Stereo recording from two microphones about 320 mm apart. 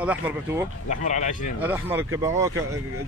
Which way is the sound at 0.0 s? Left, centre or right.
Centre.